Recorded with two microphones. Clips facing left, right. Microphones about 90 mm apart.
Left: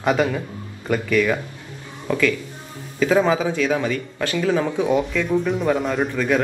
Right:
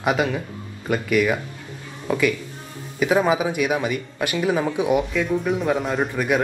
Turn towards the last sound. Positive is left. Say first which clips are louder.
# left 1 dB
turn(degrees=0)  # may be behind; listen again after turning